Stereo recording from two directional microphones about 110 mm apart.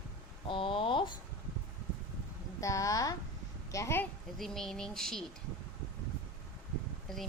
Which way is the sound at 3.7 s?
30° left (ahead or behind).